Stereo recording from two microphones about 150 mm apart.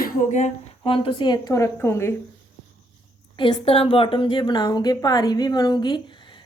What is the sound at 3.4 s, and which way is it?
A woman's voice, 35° left (ahead or behind).